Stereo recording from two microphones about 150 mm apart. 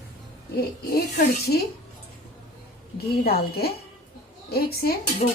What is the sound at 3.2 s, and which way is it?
A woman's voice, 90° left.